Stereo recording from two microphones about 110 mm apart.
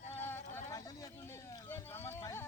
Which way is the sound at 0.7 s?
35° left (ahead or behind).